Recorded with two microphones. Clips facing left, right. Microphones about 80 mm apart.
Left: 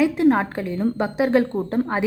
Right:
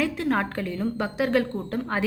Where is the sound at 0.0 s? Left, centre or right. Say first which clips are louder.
Left 7 dB; left.